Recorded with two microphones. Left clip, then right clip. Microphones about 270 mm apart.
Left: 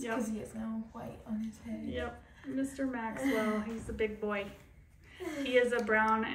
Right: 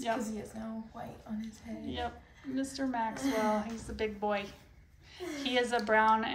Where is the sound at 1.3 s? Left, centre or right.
Centre.